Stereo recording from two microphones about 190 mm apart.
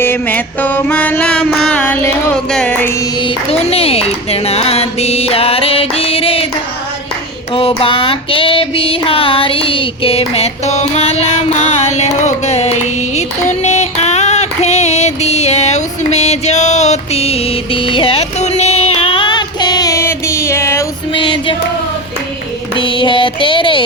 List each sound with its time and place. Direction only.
0.0 s music: 10° left (ahead or behind)
2.5 s speech: 5° left (ahead or behind); by 6.5 s 30° left (ahead or behind)
7.8 s female singing: 25° left (ahead or behind)
12.2 s music: 35° left (ahead or behind); by 20.8 s 15° left (ahead or behind)
21.1 s music: 25° left (ahead or behind)
22.8 s music: 25° left (ahead or behind)